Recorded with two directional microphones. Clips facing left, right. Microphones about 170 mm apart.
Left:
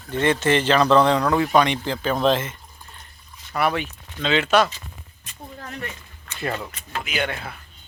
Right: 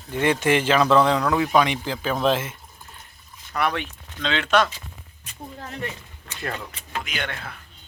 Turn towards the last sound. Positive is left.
turn(degrees=5)  # may be behind; listen again after turning